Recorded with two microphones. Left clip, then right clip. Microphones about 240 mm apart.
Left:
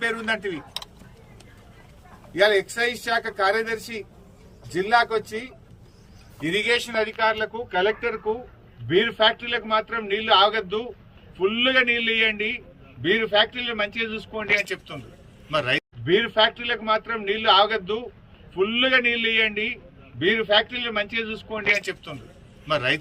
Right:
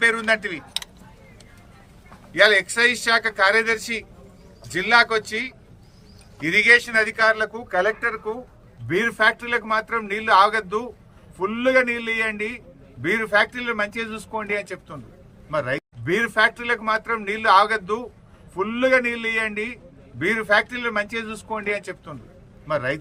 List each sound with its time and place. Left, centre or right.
0.0 s a man's voice: centre
2.3 s a man's voice: centre
6.7 s a man's voice: centre
7.7 s speech: right
8.9 s a man's voice: centre